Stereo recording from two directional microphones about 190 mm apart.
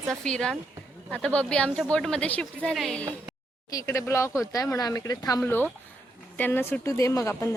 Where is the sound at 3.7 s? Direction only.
15° left (ahead or behind).